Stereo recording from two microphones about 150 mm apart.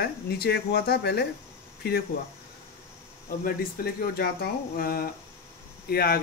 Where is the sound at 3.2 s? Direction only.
85° left.